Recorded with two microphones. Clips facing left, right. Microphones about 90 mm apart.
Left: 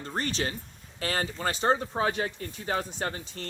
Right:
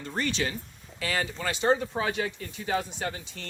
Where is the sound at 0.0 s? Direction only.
35° left (ahead or behind).